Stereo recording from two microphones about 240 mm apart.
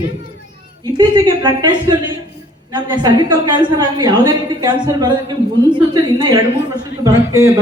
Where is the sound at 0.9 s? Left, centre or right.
Centre.